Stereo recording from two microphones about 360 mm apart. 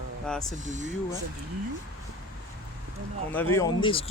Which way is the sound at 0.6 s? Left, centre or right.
Centre.